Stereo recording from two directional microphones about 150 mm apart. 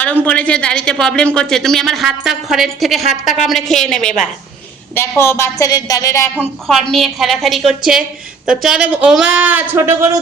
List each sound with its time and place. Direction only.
0.3 s speech: 10° left (ahead or behind)
4.9 s a woman's voice: 15° left (ahead or behind)
6.9 s speech: centre (ahead or behind); by 10.1 s 15° right (ahead or behind)